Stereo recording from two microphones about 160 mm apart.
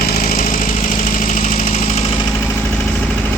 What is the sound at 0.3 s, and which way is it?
Engine, 55° left (ahead or behind).